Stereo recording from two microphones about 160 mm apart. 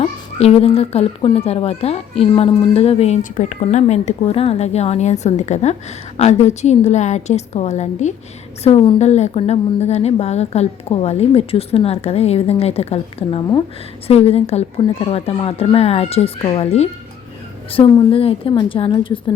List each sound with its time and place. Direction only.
0.0 s a woman's voice: 40° left (ahead or behind)
3.3 s a woman's voice: 50° left (ahead or behind); by 19.2 s 30° left (ahead or behind)